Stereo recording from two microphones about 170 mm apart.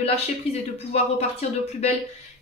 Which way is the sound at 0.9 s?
40° left (ahead or behind).